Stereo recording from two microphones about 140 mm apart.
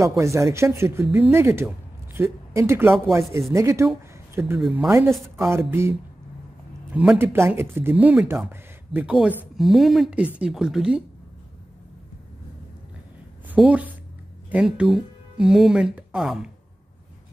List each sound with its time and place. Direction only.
0.2 s speech: 20° right (ahead or behind)
4.6 s speech: centre (ahead or behind)
5.5 s speech: 20° right (ahead or behind)
6.9 s speech: 5° right (ahead or behind)
7.2 s speech: 20° right (ahead or behind)
13.6 s speech: 10° right (ahead or behind)